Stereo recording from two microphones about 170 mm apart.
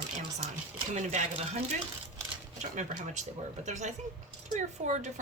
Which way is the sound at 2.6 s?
45° right (ahead or behind).